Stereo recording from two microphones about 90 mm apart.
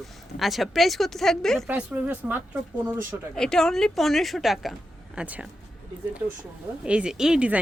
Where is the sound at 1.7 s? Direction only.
15° right (ahead or behind).